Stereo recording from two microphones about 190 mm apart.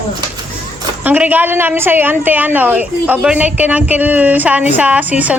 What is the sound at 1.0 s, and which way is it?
A woman's voice, 10° right (ahead or behind).